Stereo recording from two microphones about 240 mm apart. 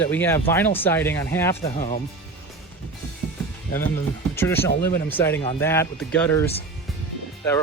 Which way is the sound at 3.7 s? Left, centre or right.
Centre.